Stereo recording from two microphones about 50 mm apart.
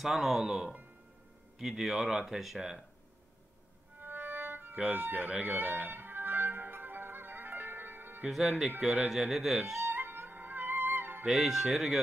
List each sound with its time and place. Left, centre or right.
0.0 s speech: centre
4.0 s music: right
4.7 s speech: centre
5.5 s music: right
8.3 s speech: centre
9.9 s music: right
11.2 s speech: centre